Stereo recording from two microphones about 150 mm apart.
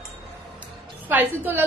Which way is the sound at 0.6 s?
10° right (ahead or behind).